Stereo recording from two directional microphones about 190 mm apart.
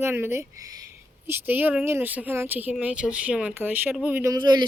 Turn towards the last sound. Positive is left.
turn(degrees=-25)  # may be behind; listen again after turning